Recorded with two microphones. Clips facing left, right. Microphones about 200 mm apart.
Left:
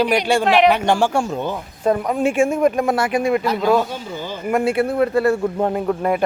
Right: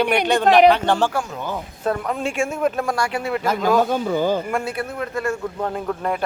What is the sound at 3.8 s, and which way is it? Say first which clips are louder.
Speech: right 9 dB; 50° right (ahead or behind).